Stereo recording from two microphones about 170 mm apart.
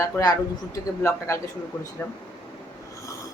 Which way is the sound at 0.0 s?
20° left (ahead or behind).